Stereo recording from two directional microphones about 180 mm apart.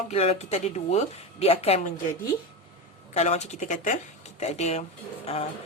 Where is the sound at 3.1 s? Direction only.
40° left (ahead or behind).